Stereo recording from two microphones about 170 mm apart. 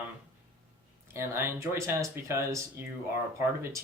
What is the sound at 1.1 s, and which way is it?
Speech, 15° right (ahead or behind).